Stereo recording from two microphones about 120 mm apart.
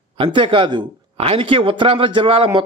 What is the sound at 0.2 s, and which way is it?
A man's voice, 45° right (ahead or behind).